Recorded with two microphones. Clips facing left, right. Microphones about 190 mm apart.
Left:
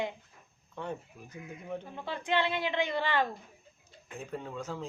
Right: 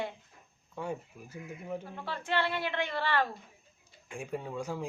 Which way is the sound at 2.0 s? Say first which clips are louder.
Left 2 dB; 15° left (ahead or behind).